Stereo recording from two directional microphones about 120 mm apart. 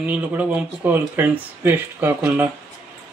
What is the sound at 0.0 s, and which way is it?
Speech, 15° right (ahead or behind).